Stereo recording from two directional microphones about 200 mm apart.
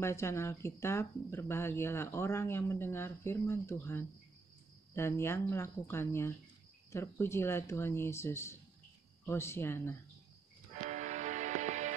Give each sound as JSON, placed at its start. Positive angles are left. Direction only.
{"t": 0.0, "sound": "speech", "side_deg": 15}
{"t": 10.8, "sound": "music", "side_deg": -35}